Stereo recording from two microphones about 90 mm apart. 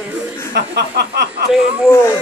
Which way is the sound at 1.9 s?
30° left (ahead or behind).